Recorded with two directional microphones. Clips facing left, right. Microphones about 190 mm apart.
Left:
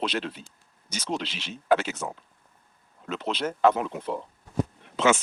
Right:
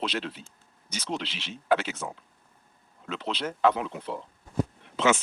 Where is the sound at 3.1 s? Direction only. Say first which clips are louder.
Left 3 dB; 45° left (ahead or behind).